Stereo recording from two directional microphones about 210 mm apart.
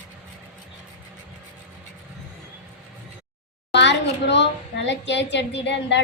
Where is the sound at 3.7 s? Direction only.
55° left (ahead or behind).